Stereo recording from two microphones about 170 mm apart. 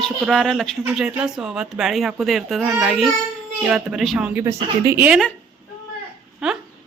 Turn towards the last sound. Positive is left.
turn(degrees=-5)  # may be behind; listen again after turning